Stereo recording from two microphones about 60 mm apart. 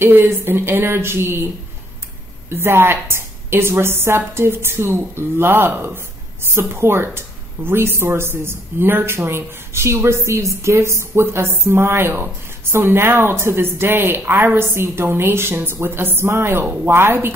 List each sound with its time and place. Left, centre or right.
0.0 s speech: right
2.5 s speech: right